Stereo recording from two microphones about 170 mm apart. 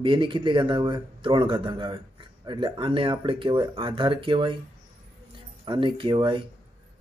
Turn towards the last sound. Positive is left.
turn(degrees=-30)  # may be behind; listen again after turning